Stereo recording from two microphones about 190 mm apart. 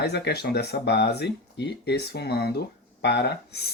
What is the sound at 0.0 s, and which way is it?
Speech, 60° left (ahead or behind).